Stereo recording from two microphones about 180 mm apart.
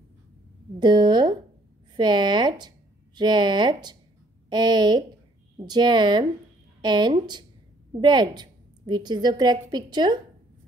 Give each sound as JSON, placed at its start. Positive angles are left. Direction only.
{"t": 0.7, "sound": "a woman's voice", "side_deg": -25}